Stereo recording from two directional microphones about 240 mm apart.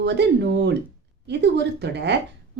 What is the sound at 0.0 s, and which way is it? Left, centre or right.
A woman's voice, right.